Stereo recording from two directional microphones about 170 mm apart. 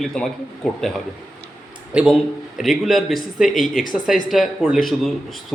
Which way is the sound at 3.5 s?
50° left (ahead or behind).